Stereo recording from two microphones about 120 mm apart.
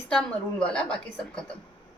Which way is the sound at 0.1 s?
10° left (ahead or behind).